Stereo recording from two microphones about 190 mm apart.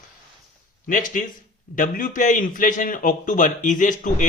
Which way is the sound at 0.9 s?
45° left (ahead or behind).